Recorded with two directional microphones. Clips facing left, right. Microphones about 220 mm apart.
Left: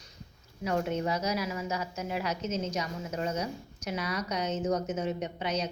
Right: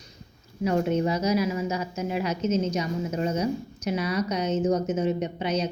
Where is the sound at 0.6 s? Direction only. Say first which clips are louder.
Right 6 dB; 25° right (ahead or behind).